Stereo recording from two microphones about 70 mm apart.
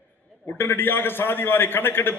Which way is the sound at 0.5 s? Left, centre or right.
Left.